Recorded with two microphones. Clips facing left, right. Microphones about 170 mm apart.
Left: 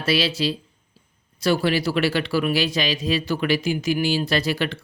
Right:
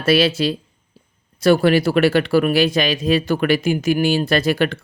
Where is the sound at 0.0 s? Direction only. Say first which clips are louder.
Right 6 dB; 50° right (ahead or behind).